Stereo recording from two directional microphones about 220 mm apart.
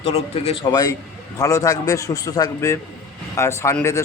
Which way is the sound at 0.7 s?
15° left (ahead or behind).